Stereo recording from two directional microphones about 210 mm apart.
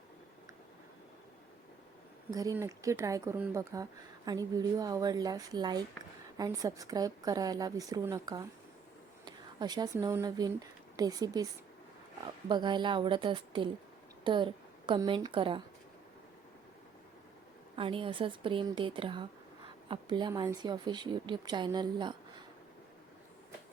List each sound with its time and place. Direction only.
2.3 s a woman's voice: 15° right (ahead or behind)
12.5 s a woman's voice: 20° right (ahead or behind)
17.7 s speech: 25° right (ahead or behind)